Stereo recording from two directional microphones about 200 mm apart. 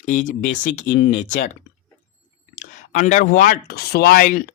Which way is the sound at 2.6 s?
35° left (ahead or behind).